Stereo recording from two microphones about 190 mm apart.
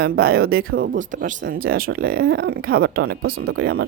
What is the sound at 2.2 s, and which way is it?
Speech, 90° right.